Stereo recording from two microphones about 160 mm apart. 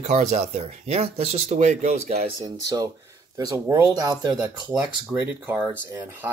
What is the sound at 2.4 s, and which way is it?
Speech, 25° right (ahead or behind).